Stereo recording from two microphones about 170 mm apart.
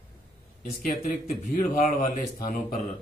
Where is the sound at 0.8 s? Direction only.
55° left (ahead or behind).